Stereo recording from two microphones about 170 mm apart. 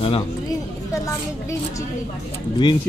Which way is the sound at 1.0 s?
20° left (ahead or behind).